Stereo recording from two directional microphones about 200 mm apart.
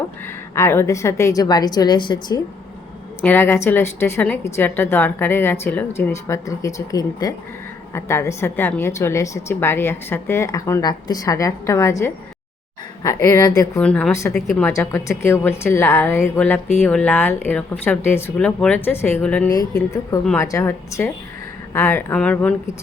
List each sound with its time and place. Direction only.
0.5 s a woman's voice: 15° left (ahead or behind)
3.2 s a woman's voice: 10° left (ahead or behind)
13.8 s a woman's voice: 5° left (ahead or behind)